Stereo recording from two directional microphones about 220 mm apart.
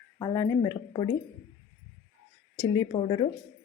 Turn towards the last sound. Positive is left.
turn(degrees=20)  # may be behind; listen again after turning